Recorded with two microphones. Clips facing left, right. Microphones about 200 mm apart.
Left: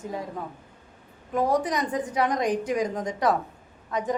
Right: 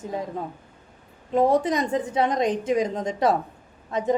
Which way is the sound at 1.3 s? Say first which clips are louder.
Right 4 dB; 25° right (ahead or behind).